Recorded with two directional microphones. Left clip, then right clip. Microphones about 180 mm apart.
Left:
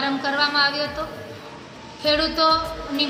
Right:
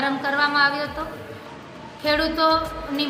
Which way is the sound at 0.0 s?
20° right (ahead or behind).